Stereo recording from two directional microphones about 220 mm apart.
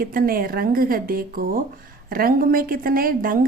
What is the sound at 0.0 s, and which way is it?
Speech, 40° right (ahead or behind).